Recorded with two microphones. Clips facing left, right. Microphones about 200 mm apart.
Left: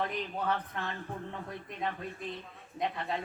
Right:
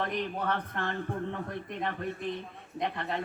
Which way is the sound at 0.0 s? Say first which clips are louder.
Right 2 dB; 65° right (ahead or behind).